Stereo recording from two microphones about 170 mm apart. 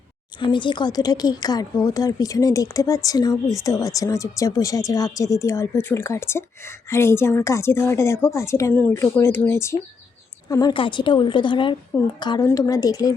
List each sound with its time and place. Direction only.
0.3 s speech: 30° left (ahead or behind)